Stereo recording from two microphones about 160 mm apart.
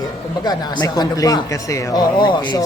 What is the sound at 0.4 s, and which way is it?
Speech, 25° left (ahead or behind).